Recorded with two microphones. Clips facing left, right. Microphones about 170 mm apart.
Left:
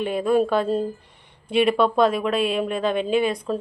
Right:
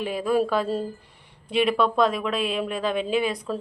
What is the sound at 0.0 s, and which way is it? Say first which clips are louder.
A woman's voice: left 3 dB; centre (ahead or behind).